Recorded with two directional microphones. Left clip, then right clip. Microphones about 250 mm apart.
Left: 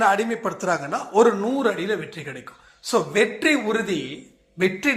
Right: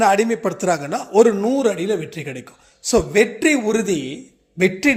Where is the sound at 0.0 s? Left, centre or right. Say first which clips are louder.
Right 4 dB; right.